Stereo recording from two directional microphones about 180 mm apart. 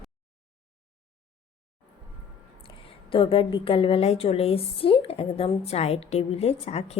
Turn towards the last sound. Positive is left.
turn(degrees=35)  # may be behind; listen again after turning